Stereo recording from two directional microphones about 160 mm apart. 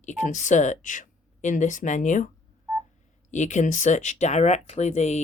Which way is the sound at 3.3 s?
50° left (ahead or behind).